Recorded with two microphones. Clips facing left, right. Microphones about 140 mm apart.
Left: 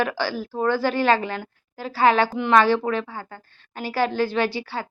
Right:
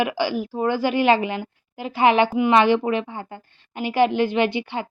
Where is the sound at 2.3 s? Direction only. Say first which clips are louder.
Right 1 dB; 10° right (ahead or behind).